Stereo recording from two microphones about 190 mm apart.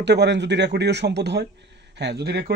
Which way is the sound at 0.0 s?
65° right (ahead or behind).